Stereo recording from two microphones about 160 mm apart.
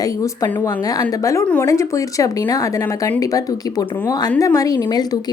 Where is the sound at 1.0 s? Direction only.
20° left (ahead or behind).